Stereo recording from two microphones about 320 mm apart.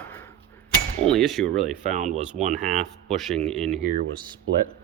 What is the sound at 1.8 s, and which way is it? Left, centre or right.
Speech, right.